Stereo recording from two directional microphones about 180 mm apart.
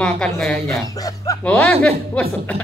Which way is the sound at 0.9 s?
20° left (ahead or behind).